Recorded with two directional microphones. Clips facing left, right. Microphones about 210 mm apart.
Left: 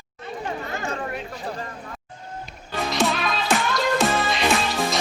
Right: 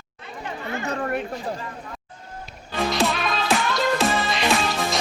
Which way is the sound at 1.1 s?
55° right (ahead or behind).